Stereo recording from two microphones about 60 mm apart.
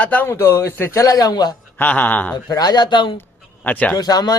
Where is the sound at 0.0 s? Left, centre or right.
Left.